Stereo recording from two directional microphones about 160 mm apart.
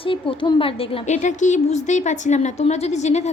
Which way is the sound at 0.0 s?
35° left (ahead or behind).